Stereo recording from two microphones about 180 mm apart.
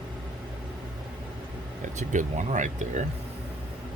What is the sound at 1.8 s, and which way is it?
Speech, 40° right (ahead or behind).